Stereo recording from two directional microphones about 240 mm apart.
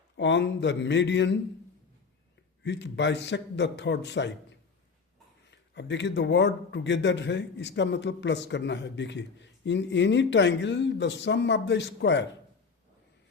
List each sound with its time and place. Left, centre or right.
0.2 s a man's voice: left
2.6 s a man's voice: left